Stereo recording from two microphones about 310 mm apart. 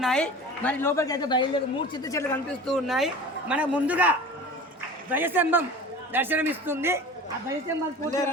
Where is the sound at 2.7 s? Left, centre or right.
Centre.